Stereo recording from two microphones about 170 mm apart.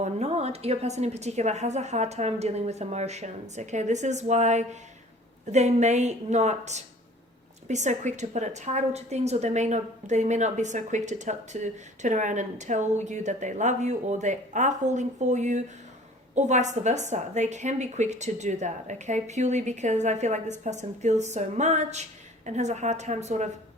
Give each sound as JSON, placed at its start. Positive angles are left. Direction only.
{"t": 0.0, "sound": "a woman's voice", "side_deg": -40}